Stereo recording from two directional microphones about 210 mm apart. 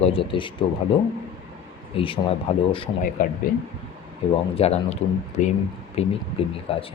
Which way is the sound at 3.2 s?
40° left (ahead or behind).